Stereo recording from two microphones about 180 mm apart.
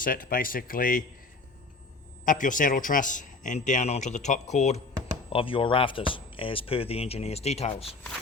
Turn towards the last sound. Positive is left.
turn(degrees=35)  # may be behind; listen again after turning